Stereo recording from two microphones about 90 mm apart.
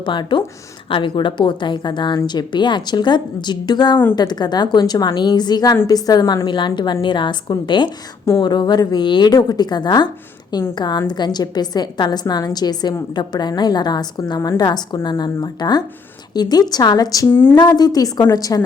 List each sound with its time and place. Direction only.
0.0 s a woman's voice: 60° left (ahead or behind); by 18.6 s 40° left (ahead or behind)